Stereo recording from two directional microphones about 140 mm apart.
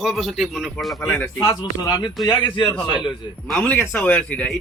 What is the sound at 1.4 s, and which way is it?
A man's voice, 25° left (ahead or behind).